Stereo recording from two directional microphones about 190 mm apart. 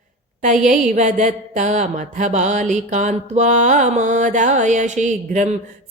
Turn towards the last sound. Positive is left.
turn(degrees=-40)  # may be behind; listen again after turning